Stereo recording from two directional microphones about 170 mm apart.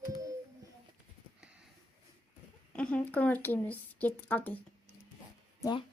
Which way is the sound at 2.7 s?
5° left (ahead or behind).